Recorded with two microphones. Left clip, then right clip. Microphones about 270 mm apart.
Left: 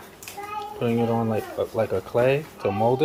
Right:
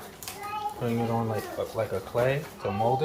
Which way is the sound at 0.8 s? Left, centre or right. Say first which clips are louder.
Left 8 dB; left.